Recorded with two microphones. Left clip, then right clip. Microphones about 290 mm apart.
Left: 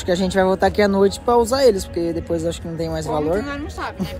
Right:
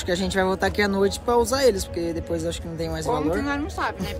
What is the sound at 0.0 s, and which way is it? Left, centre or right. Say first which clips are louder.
Speech: left 5 dB; centre.